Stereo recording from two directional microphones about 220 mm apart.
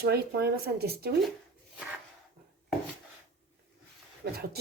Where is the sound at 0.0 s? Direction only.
45° right (ahead or behind).